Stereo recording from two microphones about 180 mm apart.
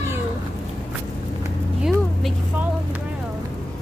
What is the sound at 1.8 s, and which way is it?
Speech, 5° right (ahead or behind).